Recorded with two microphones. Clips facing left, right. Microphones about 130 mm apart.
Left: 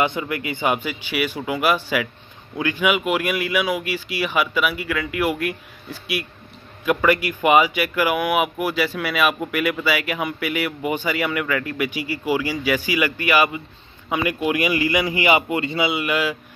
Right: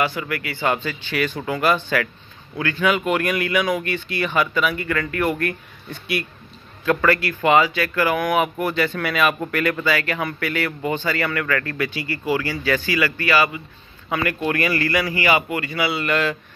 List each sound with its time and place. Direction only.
0.0 s speech: 20° left (ahead or behind); by 6.2 s 5° left (ahead or behind)
6.8 s speech: 15° left (ahead or behind)